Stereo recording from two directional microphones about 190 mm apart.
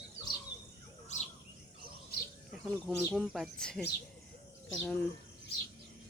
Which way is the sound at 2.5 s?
Centre (ahead or behind).